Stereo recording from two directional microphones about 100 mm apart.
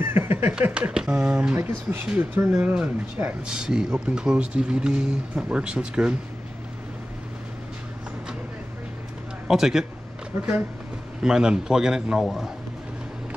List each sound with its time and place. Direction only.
0.0 s a sound: 25° right (ahead or behind)
0.6 s speech: 10° right (ahead or behind)
1.6 s speech: 20° right (ahead or behind)
2.5 s speech: 10° right (ahead or behind)
9.5 s a man's voice: 5° right (ahead or behind)
11.2 s speech: 5° right (ahead or behind)